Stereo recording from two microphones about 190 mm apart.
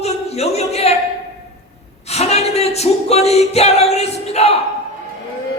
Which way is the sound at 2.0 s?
35° left (ahead or behind).